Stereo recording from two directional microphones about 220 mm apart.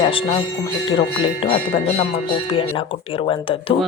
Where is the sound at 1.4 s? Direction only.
30° left (ahead or behind).